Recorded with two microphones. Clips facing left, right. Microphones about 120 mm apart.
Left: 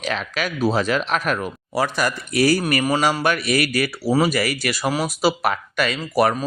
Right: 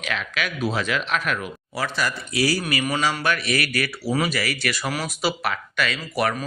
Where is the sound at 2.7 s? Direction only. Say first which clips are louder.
Left 4 dB; 40° left (ahead or behind).